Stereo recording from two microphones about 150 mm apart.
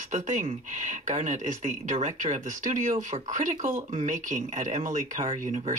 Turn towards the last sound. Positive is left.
turn(degrees=-55)  # may be behind; listen again after turning